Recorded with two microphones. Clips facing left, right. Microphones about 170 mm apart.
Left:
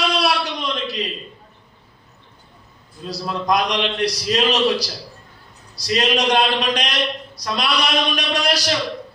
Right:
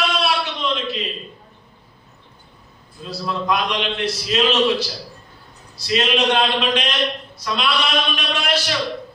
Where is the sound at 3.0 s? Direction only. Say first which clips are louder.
Left 1 dB; 40° left (ahead or behind).